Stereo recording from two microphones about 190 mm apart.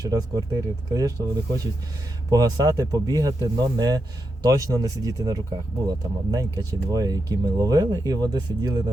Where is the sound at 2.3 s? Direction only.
20° right (ahead or behind).